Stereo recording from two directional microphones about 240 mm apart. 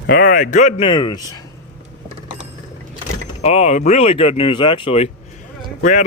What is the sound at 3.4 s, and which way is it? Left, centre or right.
Speech, left.